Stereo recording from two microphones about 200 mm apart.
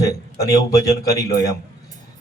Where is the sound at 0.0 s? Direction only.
15° left (ahead or behind).